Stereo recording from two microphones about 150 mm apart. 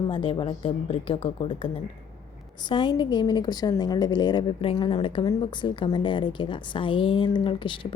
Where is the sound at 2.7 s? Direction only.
30° left (ahead or behind).